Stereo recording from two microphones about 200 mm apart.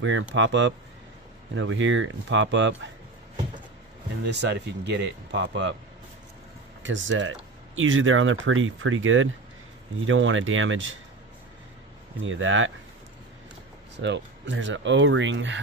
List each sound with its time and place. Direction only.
0.0 s speech: 70° right (ahead or behind)
4.2 s speech: 60° right (ahead or behind)
6.8 s speech: 70° right (ahead or behind)
12.2 s speech: 75° right (ahead or behind)
13.9 s speech: 60° right (ahead or behind)